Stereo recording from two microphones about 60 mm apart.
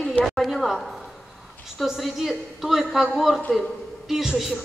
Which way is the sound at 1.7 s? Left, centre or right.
Centre.